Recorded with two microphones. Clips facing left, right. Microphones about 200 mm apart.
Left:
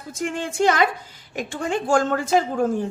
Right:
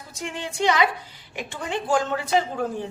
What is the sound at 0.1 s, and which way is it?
A woman's voice, 50° left (ahead or behind).